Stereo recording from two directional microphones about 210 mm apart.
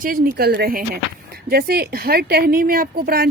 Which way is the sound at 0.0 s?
45° right (ahead or behind).